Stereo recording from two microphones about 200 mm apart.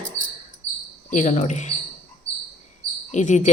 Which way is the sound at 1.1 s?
40° left (ahead or behind).